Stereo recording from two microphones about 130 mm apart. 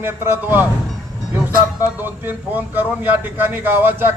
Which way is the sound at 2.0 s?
15° right (ahead or behind).